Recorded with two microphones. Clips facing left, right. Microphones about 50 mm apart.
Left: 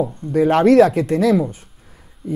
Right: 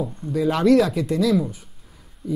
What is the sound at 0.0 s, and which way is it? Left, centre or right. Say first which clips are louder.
Speech: left 5 dB; left.